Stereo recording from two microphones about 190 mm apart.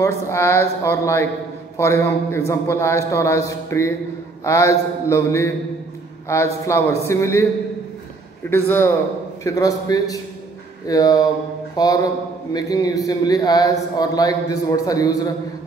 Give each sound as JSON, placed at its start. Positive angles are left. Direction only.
{"t": 0.0, "sound": "a man's voice", "side_deg": 15}
{"t": 8.5, "sound": "a man's voice", "side_deg": 10}
{"t": 11.7, "sound": "mantra", "side_deg": 20}
{"t": 12.5, "sound": "a man's voice", "side_deg": 20}